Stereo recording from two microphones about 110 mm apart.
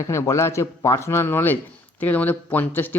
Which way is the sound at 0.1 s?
25° left (ahead or behind).